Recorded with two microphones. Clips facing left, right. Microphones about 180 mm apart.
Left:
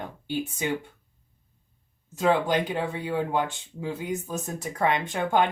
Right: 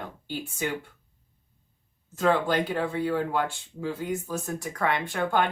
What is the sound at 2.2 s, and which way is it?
Speech, 15° left (ahead or behind).